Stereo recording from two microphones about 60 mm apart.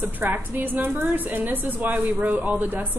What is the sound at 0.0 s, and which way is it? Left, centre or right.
A woman's voice, right.